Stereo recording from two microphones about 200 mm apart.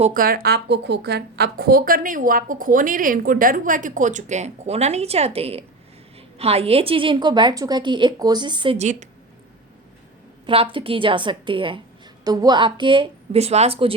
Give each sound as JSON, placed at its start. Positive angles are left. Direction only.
{"t": 0.0, "sound": "a woman's voice", "side_deg": -45}
{"t": 10.4, "sound": "a woman's voice", "side_deg": -25}